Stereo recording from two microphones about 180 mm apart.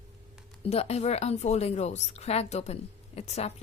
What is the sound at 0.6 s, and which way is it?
A woman's voice, 35° left (ahead or behind).